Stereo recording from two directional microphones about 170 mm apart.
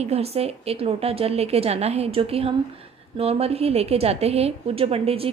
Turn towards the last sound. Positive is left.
turn(degrees=-35)  # may be behind; listen again after turning